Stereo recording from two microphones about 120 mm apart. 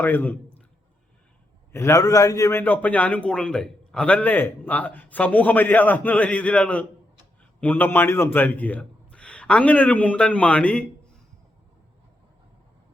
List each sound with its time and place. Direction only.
0.0 s a man's voice: 15° left (ahead or behind)
1.7 s a man's voice: 25° left (ahead or behind)